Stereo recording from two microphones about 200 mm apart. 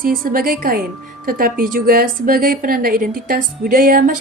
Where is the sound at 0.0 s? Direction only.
45° right (ahead or behind).